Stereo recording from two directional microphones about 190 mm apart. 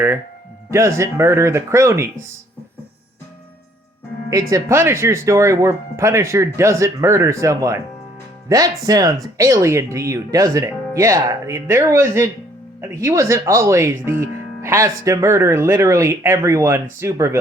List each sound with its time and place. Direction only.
0.7 s speech: 15° right (ahead or behind)
4.3 s speech: 15° right (ahead or behind)